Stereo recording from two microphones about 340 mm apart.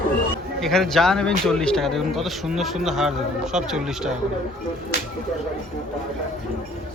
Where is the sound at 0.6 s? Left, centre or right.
Centre.